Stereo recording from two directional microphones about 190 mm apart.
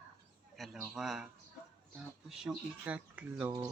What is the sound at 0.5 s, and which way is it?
Speech, centre (ahead or behind).